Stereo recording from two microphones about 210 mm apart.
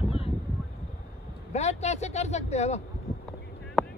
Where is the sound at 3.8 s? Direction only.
Centre (ahead or behind).